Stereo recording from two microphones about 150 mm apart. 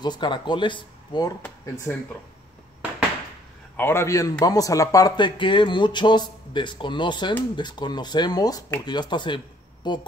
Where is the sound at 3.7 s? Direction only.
15° left (ahead or behind).